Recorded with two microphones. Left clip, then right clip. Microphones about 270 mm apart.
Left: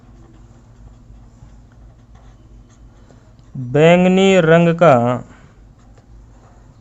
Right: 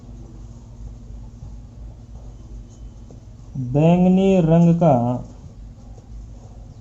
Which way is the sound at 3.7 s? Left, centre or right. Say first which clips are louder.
Left 7 dB; left.